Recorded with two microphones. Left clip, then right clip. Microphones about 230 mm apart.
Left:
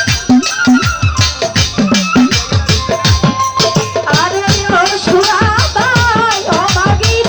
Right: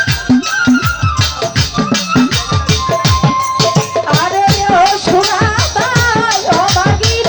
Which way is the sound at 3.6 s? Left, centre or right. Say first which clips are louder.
Even; left.